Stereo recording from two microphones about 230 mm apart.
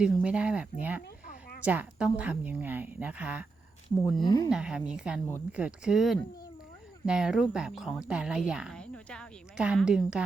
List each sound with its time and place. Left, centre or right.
0.0 s a woman's voice: centre
4.2 s speech: centre
4.4 s a woman's voice: centre